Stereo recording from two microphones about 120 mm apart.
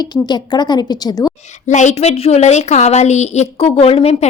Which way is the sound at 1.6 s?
80° left.